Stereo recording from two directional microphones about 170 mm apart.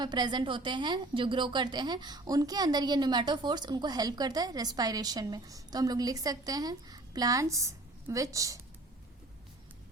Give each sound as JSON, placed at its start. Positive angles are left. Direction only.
{"t": 0.0, "sound": "a woman's voice", "side_deg": -25}